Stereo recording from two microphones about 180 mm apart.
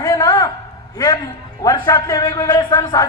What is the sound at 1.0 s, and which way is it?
A man's voice, 20° left (ahead or behind).